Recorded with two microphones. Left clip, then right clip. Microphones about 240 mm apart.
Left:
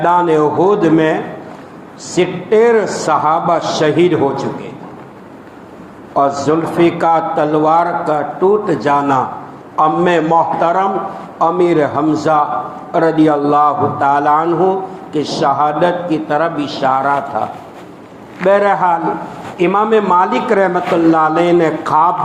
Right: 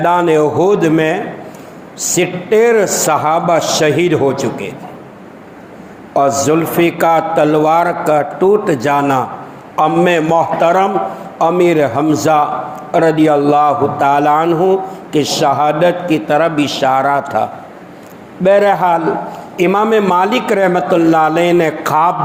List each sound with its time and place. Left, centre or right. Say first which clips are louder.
0.0 s a man's voice: even; right
6.1 s a man's voice: right 1 dB; right
18.4 s a man's voice: right 1 dB; right